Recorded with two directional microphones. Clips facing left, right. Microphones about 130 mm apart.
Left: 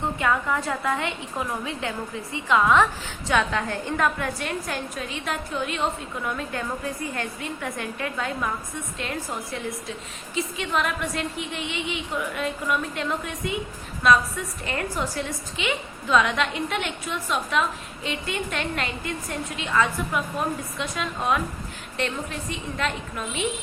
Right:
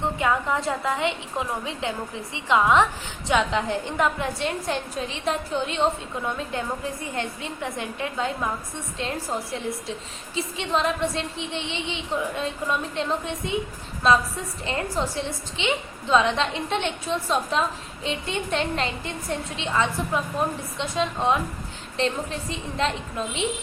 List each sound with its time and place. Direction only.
0.0 s a woman's voice: 20° right (ahead or behind)